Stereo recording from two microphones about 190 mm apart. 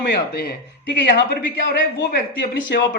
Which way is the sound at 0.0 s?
55° left (ahead or behind).